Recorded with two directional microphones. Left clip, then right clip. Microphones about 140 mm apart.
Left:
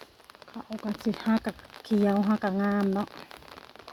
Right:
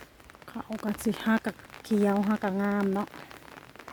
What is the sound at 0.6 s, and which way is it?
Speech, 40° right (ahead or behind).